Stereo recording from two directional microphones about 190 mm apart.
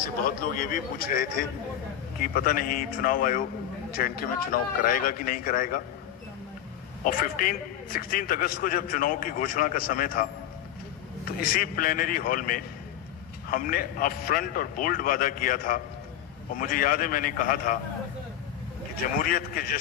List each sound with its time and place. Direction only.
0.2 s a man's voice: 45° left (ahead or behind)
7.1 s a man's voice: 50° left (ahead or behind)
11.4 s a man's voice: 45° left (ahead or behind)
19.1 s a man's voice: 45° left (ahead or behind)